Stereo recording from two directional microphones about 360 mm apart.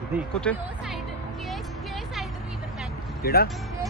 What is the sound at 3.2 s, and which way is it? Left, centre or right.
Speech, left.